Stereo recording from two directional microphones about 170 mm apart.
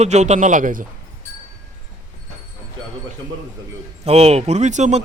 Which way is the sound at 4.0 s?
40° right (ahead or behind).